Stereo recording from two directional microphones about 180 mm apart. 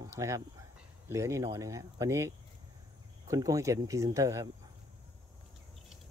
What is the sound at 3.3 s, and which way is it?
Speech, 20° right (ahead or behind).